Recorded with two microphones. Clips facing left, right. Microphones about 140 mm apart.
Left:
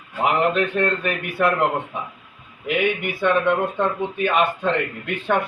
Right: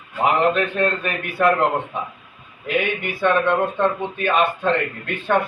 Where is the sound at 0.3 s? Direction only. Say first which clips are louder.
Left 1 dB; 20° left (ahead or behind).